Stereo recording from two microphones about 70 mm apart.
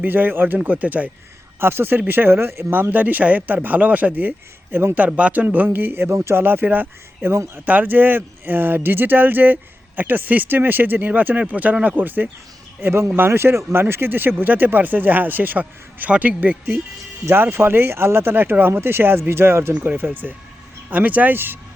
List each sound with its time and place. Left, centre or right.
0.0 s speech: right
1.5 s speech: right
6.4 s speech: right
7.3 s speech: right
7.6 s speech: right
12.8 s speech: right